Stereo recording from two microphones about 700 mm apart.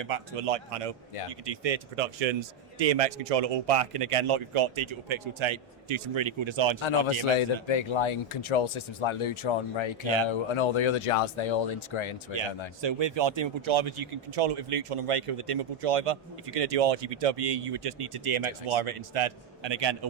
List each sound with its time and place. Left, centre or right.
0.0 s speech: right
7.7 s speech: left
12.8 s a man's voice: right